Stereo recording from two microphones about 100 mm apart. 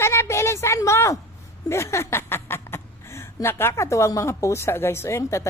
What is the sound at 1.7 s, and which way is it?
Speech, 30° left (ahead or behind).